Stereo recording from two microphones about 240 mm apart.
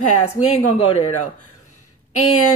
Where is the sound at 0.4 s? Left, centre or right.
Left.